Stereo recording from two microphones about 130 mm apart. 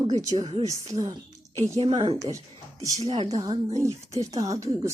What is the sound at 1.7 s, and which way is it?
Speech, 45° right (ahead or behind).